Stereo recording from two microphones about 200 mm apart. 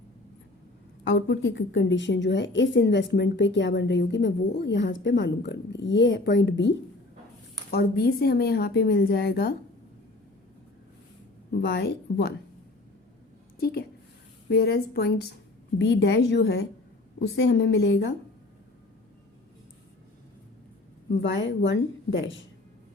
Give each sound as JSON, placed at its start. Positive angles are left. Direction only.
{"t": 1.0, "sound": "a woman's voice", "side_deg": 70}
{"t": 11.5, "sound": "speech", "side_deg": 60}
{"t": 13.6, "sound": "a woman's voice", "side_deg": 50}
{"t": 21.1, "sound": "a woman's voice", "side_deg": 65}